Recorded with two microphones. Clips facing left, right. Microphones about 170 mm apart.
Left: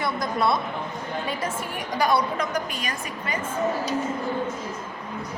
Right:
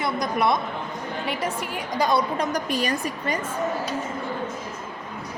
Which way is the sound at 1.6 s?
20° right (ahead or behind).